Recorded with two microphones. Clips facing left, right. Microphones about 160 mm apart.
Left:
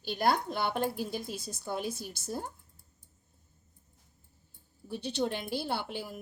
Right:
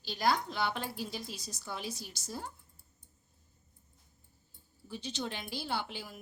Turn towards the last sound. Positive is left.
turn(degrees=55)  # may be behind; listen again after turning